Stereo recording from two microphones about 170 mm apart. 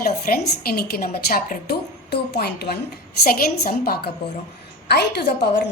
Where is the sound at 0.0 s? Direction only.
60° left (ahead or behind).